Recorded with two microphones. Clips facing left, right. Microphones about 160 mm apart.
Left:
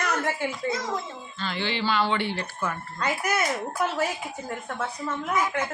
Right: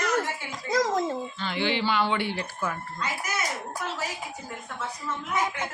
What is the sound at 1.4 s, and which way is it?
Speech, 15° right (ahead or behind).